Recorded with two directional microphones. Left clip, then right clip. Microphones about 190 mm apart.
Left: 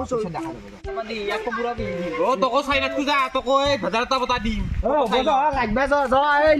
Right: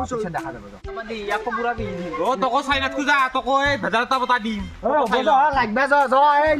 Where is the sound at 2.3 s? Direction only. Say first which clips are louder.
Right 1 dB; 10° right (ahead or behind).